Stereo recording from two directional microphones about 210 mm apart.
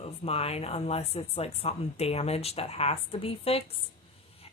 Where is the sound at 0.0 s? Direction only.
30° left (ahead or behind).